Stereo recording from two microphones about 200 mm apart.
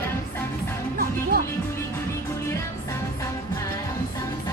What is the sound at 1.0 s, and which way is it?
Music, 50° right (ahead or behind).